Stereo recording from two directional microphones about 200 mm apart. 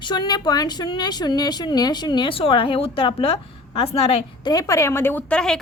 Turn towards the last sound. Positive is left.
turn(degrees=5)  # may be behind; listen again after turning